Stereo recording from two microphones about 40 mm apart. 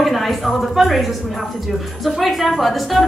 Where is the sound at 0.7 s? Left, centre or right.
Centre.